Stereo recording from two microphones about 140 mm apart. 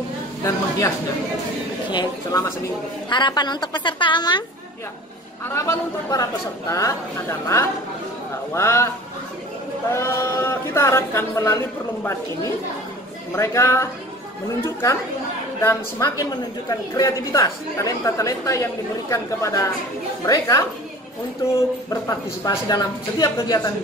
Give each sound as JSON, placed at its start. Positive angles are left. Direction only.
{"t": 0.4, "sound": "a woman's voice", "side_deg": 20}
{"t": 5.5, "sound": "a woman's voice", "side_deg": 25}
{"t": 9.9, "sound": "a woman's voice", "side_deg": 20}
{"t": 13.4, "sound": "a woman's voice", "side_deg": 20}
{"t": 22.0, "sound": "a woman's voice", "side_deg": 25}